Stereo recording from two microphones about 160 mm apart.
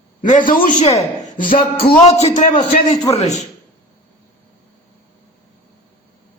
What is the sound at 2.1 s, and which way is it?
A man's voice, 45° left (ahead or behind).